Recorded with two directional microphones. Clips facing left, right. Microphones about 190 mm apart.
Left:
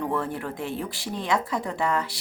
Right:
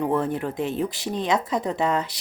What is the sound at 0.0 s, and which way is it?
Speech, 20° right (ahead or behind).